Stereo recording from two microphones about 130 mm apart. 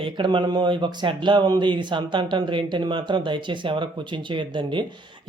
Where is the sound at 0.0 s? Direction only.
40° right (ahead or behind).